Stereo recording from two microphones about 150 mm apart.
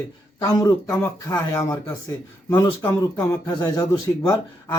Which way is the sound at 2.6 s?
25° left (ahead or behind).